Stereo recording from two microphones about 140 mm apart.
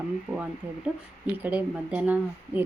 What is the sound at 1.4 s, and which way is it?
Speech, 10° right (ahead or behind).